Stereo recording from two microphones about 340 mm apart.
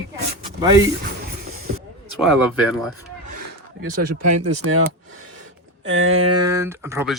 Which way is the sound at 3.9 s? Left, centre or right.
Right.